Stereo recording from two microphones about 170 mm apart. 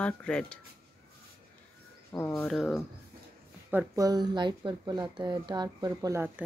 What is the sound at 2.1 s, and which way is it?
Speech, 15° left (ahead or behind).